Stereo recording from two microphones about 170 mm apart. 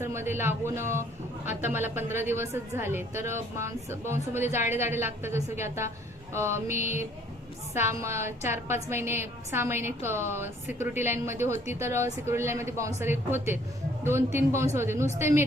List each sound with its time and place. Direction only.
0.0 s a woman's voice: 15° right (ahead or behind)